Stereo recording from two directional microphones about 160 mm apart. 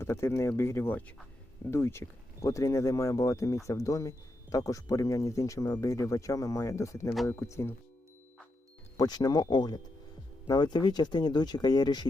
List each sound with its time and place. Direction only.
0.0 s speech: 15° left (ahead or behind)
9.0 s speech: 25° left (ahead or behind)